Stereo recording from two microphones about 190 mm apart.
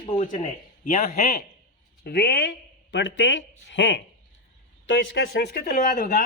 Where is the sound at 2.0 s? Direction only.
55° left (ahead or behind); by 5.5 s 80° left.